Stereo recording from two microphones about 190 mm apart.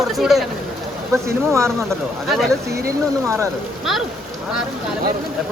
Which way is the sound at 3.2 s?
15° right (ahead or behind).